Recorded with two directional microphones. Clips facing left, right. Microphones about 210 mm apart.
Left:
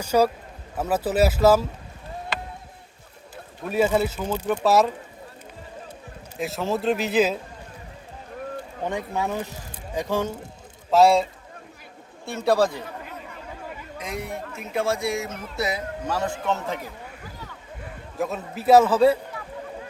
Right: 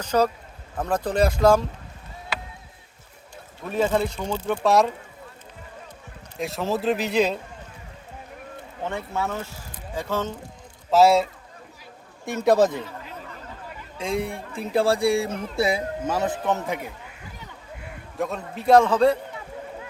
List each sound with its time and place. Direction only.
0.0 s a man's voice: 10° left (ahead or behind)
3.7 s a man's voice: 10° left (ahead or behind)
6.4 s a man's voice: centre (ahead or behind)
8.8 s speech: 15° left (ahead or behind)
10.9 s a man's voice: centre (ahead or behind)
12.2 s speech: 15° right (ahead or behind)
14.0 s speech: 30° right (ahead or behind)
18.2 s a man's voice: 5° left (ahead or behind)